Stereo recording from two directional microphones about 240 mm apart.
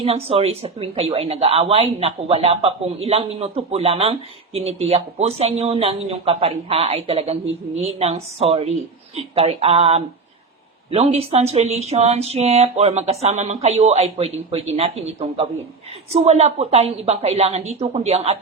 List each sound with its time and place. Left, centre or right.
0.0 s speech: right